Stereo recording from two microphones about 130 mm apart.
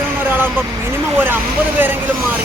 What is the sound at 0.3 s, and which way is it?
Vehicle, 15° right (ahead or behind).